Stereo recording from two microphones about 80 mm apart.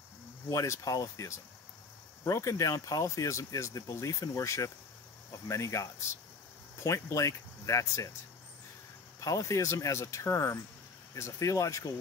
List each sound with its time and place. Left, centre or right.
0.5 s speech: left
9.2 s speech: left